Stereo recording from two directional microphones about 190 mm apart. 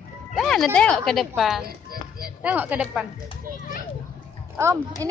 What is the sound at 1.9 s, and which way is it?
Music, 50° right (ahead or behind).